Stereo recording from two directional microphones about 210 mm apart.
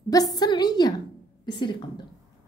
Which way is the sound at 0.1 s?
20° left (ahead or behind).